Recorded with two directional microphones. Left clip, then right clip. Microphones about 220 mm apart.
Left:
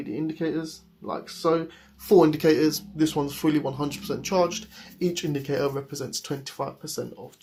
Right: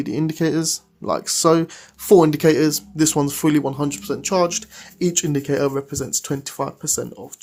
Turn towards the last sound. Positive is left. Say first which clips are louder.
# right 7 dB
turn(degrees=-40)  # may be behind; listen again after turning